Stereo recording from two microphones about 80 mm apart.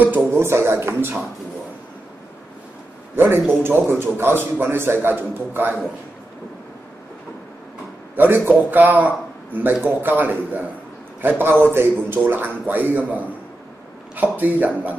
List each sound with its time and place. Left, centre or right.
0.3 s speech: right
3.2 s a man's voice: right
8.2 s a man's voice: right